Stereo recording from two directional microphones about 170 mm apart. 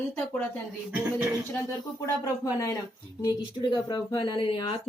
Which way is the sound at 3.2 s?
25° left (ahead or behind).